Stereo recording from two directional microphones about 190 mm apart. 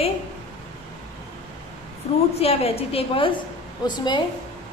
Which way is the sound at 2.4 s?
30° left (ahead or behind).